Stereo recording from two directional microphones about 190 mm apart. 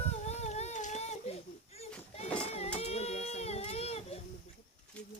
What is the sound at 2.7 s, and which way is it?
Baby cry, 35° left (ahead or behind).